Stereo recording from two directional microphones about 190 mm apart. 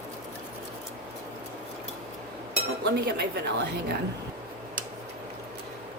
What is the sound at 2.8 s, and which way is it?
Speech, 55° right (ahead or behind).